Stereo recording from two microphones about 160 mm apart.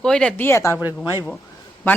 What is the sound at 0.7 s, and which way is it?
Speech, 15° right (ahead or behind).